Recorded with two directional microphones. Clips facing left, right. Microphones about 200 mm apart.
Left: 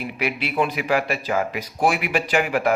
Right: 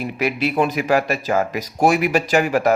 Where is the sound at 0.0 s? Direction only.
40° right (ahead or behind).